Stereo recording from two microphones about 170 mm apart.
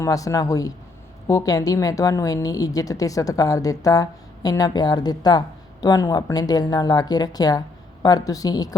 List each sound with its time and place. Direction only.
0.0 s a woman's voice: 20° left (ahead or behind)